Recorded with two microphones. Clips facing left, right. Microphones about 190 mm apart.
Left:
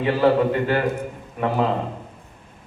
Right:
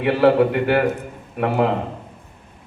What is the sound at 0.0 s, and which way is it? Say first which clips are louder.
A man's voice: right 3 dB; 65° right (ahead or behind).